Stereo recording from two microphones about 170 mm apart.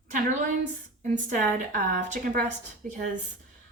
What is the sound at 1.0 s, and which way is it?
A woman's voice, 45° right (ahead or behind).